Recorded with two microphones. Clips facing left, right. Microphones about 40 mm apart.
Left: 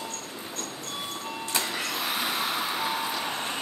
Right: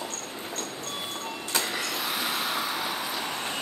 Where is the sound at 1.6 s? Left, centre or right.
Centre.